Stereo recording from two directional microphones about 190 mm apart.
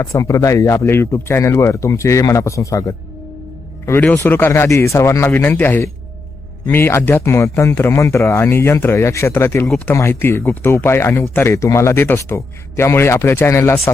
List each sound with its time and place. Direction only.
0.0 s speech: 15° left (ahead or behind)